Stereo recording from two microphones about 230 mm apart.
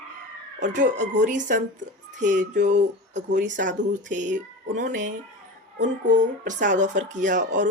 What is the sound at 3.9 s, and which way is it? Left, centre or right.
A woman's voice, right.